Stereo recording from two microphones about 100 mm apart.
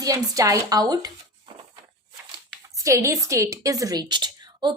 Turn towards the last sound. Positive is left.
turn(degrees=-50)  # may be behind; listen again after turning